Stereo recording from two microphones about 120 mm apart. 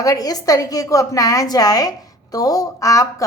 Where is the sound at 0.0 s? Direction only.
30° left (ahead or behind).